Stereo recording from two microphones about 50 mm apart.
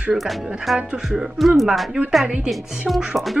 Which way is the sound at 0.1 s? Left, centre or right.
Centre.